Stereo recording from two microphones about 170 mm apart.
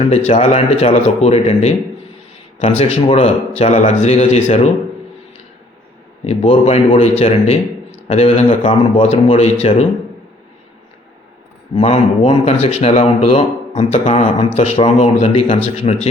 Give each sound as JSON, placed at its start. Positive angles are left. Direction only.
{"t": 0.0, "sound": "speech", "side_deg": 40}
{"t": 6.2, "sound": "speech", "side_deg": 35}
{"t": 11.7, "sound": "speech", "side_deg": 30}